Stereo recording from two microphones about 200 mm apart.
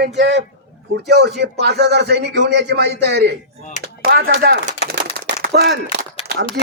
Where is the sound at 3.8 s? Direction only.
50° right (ahead or behind).